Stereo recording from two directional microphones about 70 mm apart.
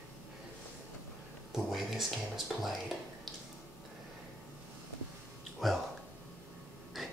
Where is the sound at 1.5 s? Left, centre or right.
Centre.